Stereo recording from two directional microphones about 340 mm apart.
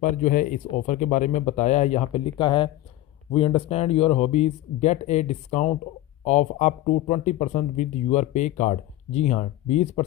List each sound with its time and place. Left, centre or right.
0.2 s speech: left